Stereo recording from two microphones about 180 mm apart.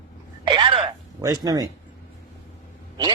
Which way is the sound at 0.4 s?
25° right (ahead or behind).